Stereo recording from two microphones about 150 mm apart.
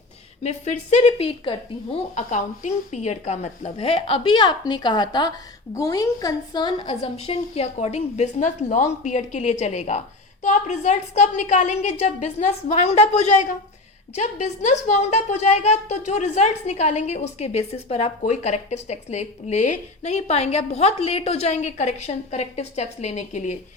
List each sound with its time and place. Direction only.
0.4 s a woman's voice: 50° left (ahead or behind)
2.3 s a woman's voice: 50° left (ahead or behind)